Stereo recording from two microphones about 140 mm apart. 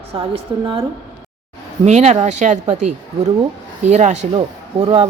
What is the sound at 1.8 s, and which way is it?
Speech, 55° right (ahead or behind).